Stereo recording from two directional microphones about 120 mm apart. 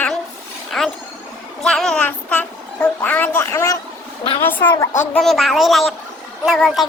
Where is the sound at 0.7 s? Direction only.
Centre (ahead or behind).